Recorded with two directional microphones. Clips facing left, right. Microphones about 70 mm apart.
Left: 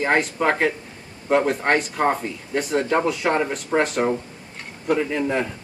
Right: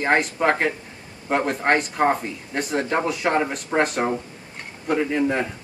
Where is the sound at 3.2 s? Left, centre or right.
Centre.